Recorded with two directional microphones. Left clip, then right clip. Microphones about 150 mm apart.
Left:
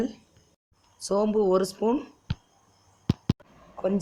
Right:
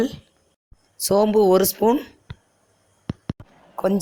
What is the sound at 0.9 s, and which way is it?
Speech, 35° right (ahead or behind).